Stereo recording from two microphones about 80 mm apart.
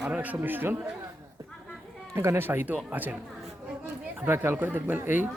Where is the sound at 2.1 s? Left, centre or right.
Right.